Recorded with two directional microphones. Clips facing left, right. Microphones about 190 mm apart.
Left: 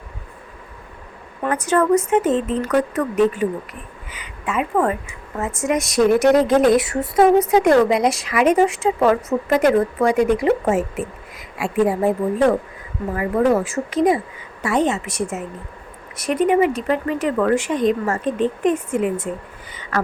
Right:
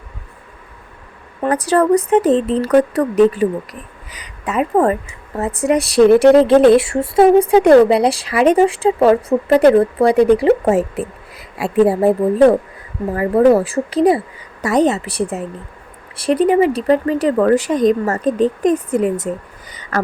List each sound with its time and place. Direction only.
1.5 s speech: 35° right (ahead or behind)